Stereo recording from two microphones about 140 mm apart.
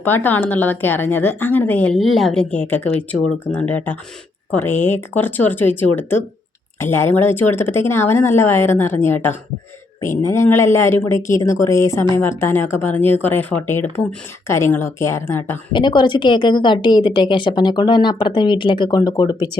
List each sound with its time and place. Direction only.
0.0 s a woman's voice: 15° left (ahead or behind)
15.7 s a woman's voice: 35° left (ahead or behind)